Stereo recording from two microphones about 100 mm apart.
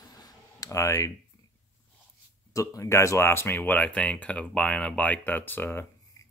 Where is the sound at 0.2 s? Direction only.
40° left (ahead or behind).